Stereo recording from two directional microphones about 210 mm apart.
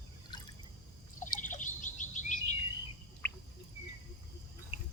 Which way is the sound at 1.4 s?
35° left (ahead or behind).